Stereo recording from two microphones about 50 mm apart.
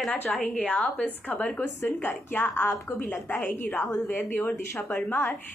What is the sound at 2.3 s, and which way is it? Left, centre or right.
A woman's voice, left.